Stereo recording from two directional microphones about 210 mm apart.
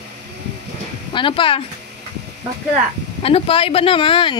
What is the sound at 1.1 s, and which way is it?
Speech, 25° left (ahead or behind).